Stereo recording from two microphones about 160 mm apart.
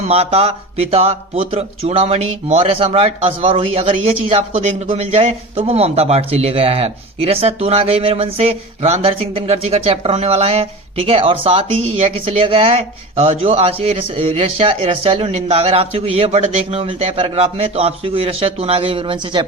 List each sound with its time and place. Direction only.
0.0 s speech: 40° right (ahead or behind)